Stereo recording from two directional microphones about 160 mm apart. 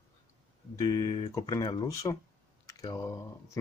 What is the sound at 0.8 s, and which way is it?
Speech, 25° left (ahead or behind).